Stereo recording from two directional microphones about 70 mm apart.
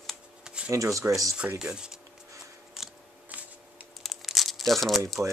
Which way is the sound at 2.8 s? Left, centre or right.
Centre.